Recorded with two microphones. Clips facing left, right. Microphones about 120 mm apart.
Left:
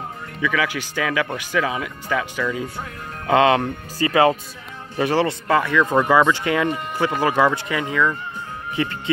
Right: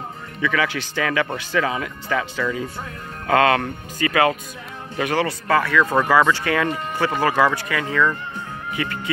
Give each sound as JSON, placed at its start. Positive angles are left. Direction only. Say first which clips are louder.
{"t": 0.4, "sound": "speech", "louder": "even", "side_deg": 10}
{"t": 3.3, "sound": "speech", "louder": "left 1 dB", "side_deg": 20}
{"t": 8.7, "sound": "speech", "louder": "left 3 dB", "side_deg": 25}